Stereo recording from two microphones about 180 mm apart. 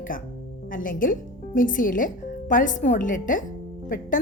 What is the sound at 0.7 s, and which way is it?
A woman's voice, 50° left (ahead or behind).